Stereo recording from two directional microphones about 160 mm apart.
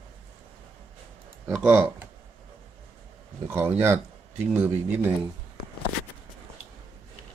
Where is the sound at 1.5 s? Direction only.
5° right (ahead or behind).